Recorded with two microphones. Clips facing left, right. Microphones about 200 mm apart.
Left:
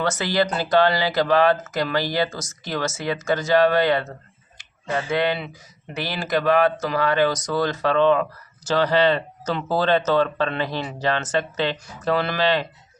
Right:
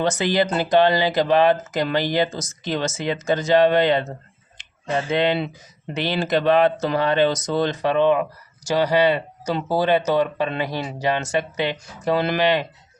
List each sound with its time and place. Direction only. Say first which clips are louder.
0.0 s speech: right 2 dB; 15° right (ahead or behind)